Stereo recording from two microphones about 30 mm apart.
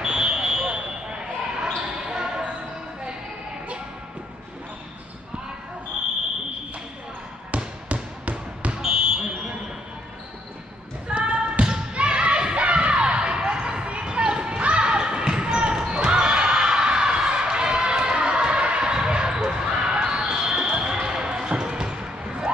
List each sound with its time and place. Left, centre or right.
0.0 s basketball bounce: right
7.5 s basketball bounce: right
8.7 s basketball bounce: right
11.1 s basketball bounce: right
11.9 s a sound: right
14.6 s basketball bounce: right
15.9 s a sound: right
18.8 s basketball bounce: right